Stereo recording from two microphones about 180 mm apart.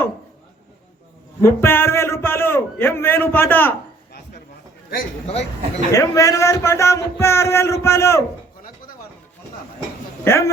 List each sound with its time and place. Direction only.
1.4 s a man's voice: 15° left (ahead or behind)
5.2 s speech: 35° left (ahead or behind)
5.9 s speech: 20° left (ahead or behind)
10.2 s speech: 15° left (ahead or behind)